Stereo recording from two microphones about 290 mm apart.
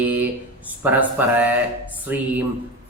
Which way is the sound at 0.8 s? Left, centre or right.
Centre.